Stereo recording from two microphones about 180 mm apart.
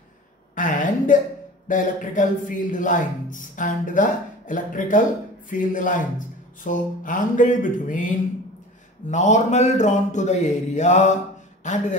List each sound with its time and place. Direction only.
0.6 s a sound: 45° left (ahead or behind)
1.7 s a man's voice: 45° left (ahead or behind)
9.1 s a man's voice: 45° left (ahead or behind)